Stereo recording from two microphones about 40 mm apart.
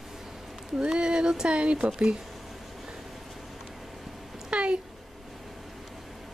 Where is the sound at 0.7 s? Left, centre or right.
Right.